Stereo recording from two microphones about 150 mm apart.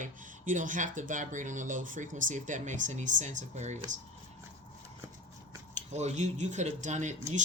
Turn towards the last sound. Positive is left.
turn(degrees=-55)  # may be behind; listen again after turning